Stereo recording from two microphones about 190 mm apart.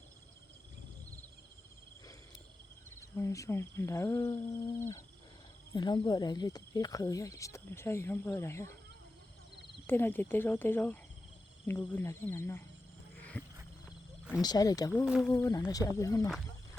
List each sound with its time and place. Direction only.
3.2 s speech: 15° left (ahead or behind)
9.8 s speech: 10° left (ahead or behind)
13.4 s wild animals: 10° left (ahead or behind)
14.4 s speech: 20° left (ahead or behind)
15.0 s speech: centre (ahead or behind)
15.3 s speech: 15° left (ahead or behind)